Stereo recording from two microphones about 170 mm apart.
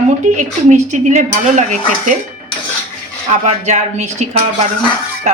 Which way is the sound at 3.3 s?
45° right (ahead or behind).